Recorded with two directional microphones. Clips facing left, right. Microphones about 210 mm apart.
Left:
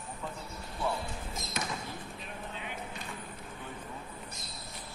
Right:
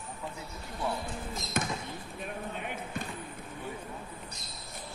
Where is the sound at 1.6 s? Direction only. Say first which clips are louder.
Right 5 dB; 50° right (ahead or behind).